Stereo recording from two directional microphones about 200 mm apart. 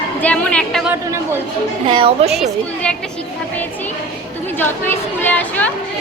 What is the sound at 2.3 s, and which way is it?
Speech, centre (ahead or behind).